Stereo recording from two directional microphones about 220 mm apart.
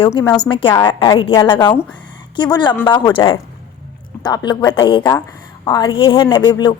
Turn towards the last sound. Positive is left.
turn(degrees=20)  # may be behind; listen again after turning